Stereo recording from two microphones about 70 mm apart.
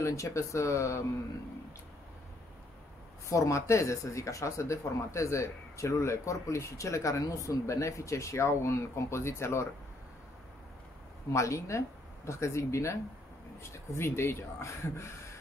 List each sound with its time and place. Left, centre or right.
0.0 s speech: left
3.3 s speech: left
11.3 s speech: left